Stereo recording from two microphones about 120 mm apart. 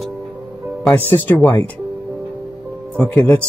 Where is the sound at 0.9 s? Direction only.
15° left (ahead or behind).